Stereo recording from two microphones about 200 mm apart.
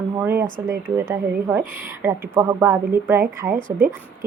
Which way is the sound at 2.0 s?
10° right (ahead or behind).